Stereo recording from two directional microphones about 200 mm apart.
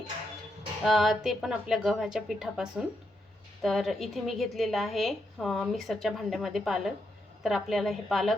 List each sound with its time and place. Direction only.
0.9 s a woman's voice: centre (ahead or behind)